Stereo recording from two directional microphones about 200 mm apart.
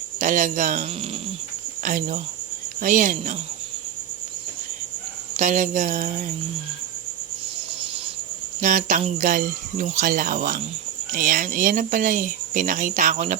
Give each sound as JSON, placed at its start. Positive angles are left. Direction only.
{"t": 0.2, "sound": "speech", "side_deg": -40}
{"t": 5.4, "sound": "speech", "side_deg": -40}
{"t": 8.6, "sound": "speech", "side_deg": -40}